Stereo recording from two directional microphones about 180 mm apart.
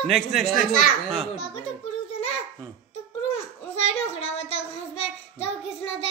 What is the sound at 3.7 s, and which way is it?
Child singing, 35° left (ahead or behind).